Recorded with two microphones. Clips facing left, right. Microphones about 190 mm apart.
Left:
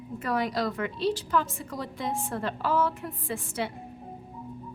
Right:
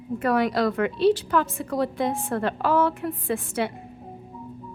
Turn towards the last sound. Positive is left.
turn(degrees=-60)  # may be behind; listen again after turning